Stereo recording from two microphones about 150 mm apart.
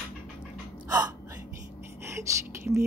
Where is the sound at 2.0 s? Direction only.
20° right (ahead or behind).